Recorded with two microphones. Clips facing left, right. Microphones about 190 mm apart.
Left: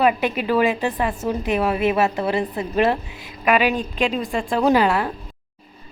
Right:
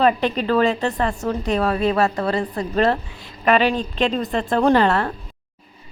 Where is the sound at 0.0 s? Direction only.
10° left (ahead or behind).